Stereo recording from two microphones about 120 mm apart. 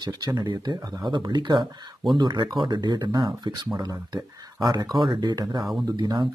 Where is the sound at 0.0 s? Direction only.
35° right (ahead or behind).